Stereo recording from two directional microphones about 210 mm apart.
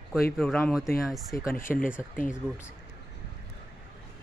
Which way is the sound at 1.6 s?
40° left (ahead or behind).